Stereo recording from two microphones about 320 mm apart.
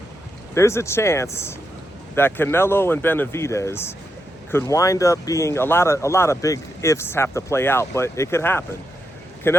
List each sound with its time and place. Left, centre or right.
0.5 s speech: centre